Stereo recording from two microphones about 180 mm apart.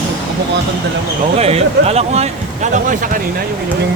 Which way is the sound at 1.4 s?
35° right (ahead or behind).